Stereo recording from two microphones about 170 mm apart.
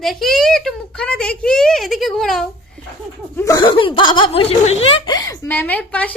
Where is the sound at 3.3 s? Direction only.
20° left (ahead or behind).